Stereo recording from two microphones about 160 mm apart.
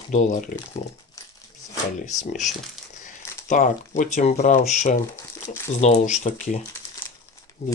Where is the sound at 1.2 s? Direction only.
20° left (ahead or behind).